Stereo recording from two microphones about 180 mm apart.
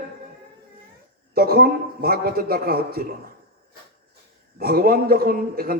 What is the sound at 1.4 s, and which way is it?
A man's voice, 55° right (ahead or behind).